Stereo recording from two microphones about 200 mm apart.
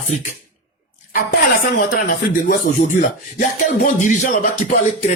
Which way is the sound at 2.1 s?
40° left (ahead or behind).